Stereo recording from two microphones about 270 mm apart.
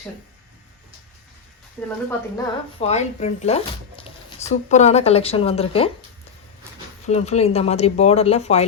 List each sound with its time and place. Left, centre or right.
2.0 s speech: centre
7.1 s speech: left